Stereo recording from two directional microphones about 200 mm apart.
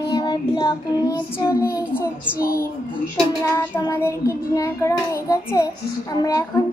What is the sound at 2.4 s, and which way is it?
Speech, 45° left (ahead or behind).